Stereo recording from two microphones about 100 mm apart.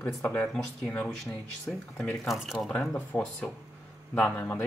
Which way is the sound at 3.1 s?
10° left (ahead or behind).